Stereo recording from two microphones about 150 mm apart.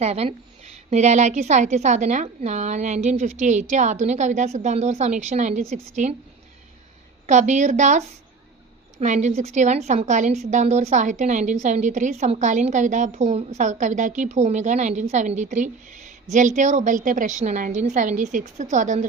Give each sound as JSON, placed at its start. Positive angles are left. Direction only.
{"t": 0.0, "sound": "a woman's voice", "side_deg": -45}
{"t": 7.3, "sound": "a woman's voice", "side_deg": -50}